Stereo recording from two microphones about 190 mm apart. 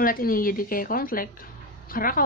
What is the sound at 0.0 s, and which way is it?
Speech, 50° left (ahead or behind).